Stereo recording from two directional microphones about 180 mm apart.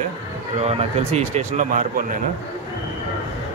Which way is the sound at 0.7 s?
35° right (ahead or behind).